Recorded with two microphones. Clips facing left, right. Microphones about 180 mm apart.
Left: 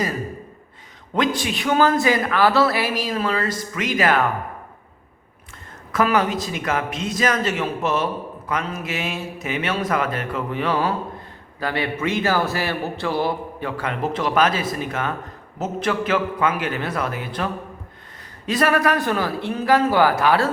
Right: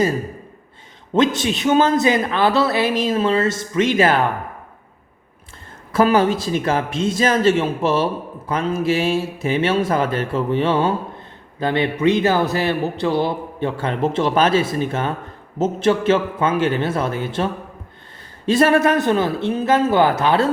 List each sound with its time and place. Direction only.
1.1 s a man's voice: 25° right (ahead or behind)
5.9 s a man's voice: 30° right (ahead or behind)